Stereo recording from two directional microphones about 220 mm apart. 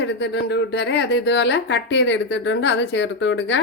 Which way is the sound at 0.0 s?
50° left (ahead or behind).